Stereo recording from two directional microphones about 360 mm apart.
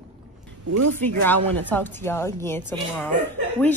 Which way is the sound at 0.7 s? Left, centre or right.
Right.